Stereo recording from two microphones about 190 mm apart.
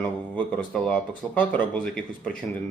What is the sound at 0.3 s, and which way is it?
Speech, 5° left (ahead or behind).